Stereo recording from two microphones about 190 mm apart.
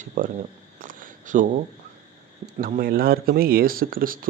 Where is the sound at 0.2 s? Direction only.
50° right (ahead or behind).